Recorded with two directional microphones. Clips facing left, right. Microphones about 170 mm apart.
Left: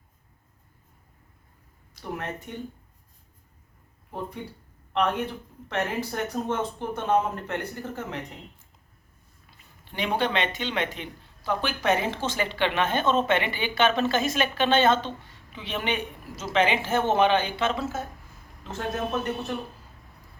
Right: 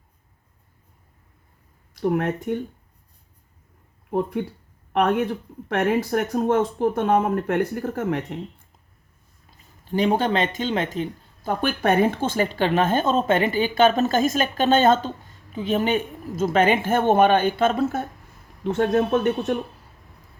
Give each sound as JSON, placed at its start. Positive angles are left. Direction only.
{"t": 2.0, "sound": "speech", "side_deg": -60}
{"t": 4.1, "sound": "speech", "side_deg": -65}
{"t": 9.6, "sound": "speech", "side_deg": -40}